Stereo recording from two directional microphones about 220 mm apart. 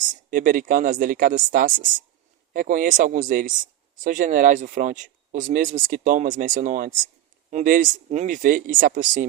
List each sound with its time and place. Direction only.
0.1 s speech: 40° right (ahead or behind)